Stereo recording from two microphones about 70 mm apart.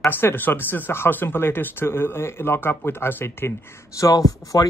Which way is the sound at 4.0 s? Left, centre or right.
Left.